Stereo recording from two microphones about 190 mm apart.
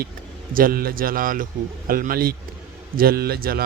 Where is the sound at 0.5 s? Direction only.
50° right (ahead or behind).